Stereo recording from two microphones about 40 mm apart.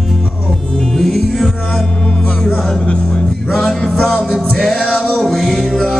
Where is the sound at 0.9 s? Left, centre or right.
Centre.